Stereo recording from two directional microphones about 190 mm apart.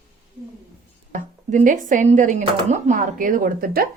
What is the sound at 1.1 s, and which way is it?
A woman's voice, 45° right (ahead or behind).